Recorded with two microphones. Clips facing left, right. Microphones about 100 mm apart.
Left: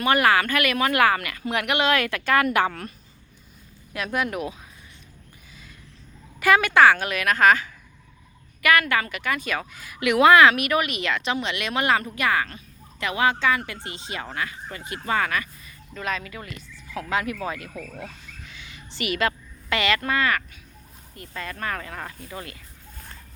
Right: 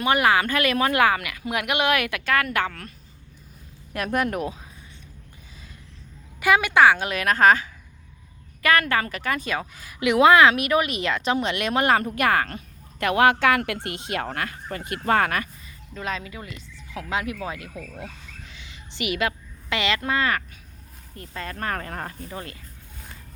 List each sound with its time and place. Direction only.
0.0 s a woman's voice: 15° right (ahead or behind)
1.1 s speech: 10° right (ahead or behind)
2.2 s a woman's voice: 5° left (ahead or behind)
3.9 s a woman's voice: 45° right (ahead or behind)
6.4 s a woman's voice: 15° right (ahead or behind); by 15.4 s 55° right (ahead or behind)
16.0 s a woman's voice: 25° right (ahead or behind)
18.4 s a sound: 30° right (ahead or behind)
19.7 s a woman's voice: 20° right (ahead or behind)